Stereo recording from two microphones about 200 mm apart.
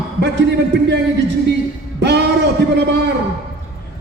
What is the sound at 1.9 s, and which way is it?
Music, 60° right (ahead or behind).